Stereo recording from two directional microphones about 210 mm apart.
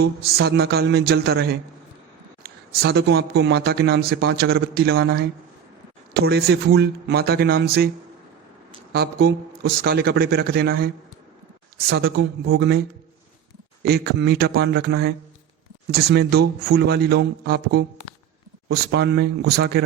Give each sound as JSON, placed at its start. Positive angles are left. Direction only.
{"t": 0.0, "sound": "speech", "side_deg": -50}
{"t": 2.8, "sound": "speech", "side_deg": -50}
{"t": 8.9, "sound": "speech", "side_deg": -45}
{"t": 12.2, "sound": "speech", "side_deg": -50}
{"t": 13.8, "sound": "speech", "side_deg": -50}